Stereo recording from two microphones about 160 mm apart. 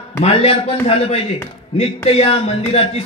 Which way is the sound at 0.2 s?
40° left (ahead or behind).